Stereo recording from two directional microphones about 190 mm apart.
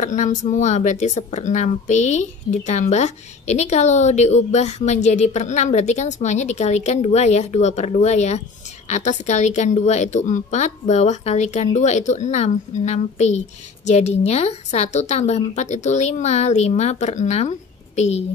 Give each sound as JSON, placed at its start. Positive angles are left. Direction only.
{"t": 0.0, "sound": "speech", "side_deg": 40}